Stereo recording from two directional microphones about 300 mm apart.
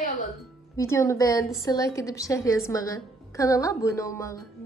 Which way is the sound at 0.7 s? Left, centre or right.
Centre.